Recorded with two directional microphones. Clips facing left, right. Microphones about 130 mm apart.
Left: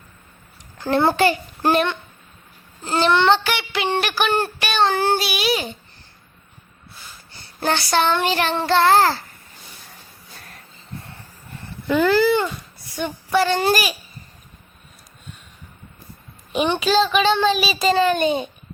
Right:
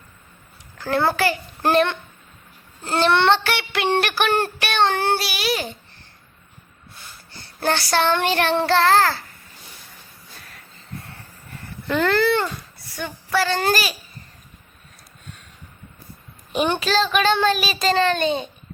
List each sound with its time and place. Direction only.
0.8 s a child's voice: 20° left (ahead or behind)
2.8 s child singing: centre (ahead or behind)
7.6 s child singing: centre (ahead or behind)
8.2 s a child's voice: 10° left (ahead or behind)
11.9 s a child's voice: 5° left (ahead or behind)
13.0 s a child's voice: 20° left (ahead or behind)
16.8 s child singing: 5° left (ahead or behind)